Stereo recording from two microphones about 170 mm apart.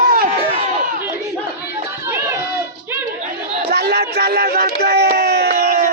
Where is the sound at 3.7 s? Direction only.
70° right (ahead or behind).